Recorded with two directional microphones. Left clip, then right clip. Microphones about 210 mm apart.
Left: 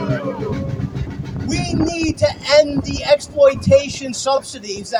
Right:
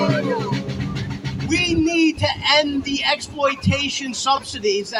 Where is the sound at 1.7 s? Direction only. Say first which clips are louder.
Right 1 dB; 55° left (ahead or behind).